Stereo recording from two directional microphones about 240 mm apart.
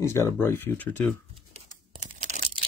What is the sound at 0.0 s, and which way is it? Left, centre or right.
Speech, centre.